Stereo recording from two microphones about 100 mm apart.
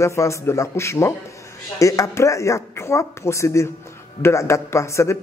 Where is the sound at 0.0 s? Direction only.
30° left (ahead or behind).